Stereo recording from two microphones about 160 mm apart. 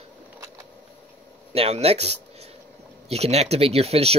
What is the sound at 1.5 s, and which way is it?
Speech, 40° right (ahead or behind).